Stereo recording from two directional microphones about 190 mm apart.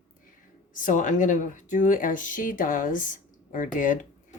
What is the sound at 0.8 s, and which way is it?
Speech, 40° left (ahead or behind).